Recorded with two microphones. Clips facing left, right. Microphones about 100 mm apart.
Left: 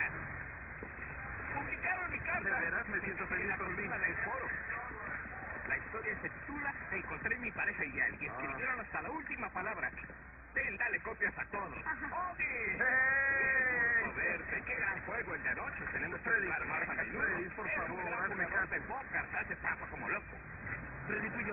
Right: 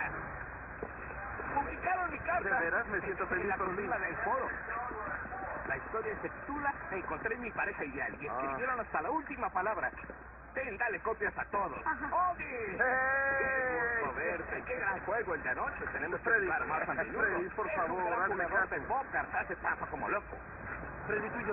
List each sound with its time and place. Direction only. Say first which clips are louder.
1.5 s speech: right 7 dB; 35° right (ahead or behind)